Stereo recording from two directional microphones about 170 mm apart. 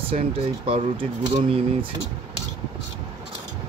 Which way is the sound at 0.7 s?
35° right (ahead or behind).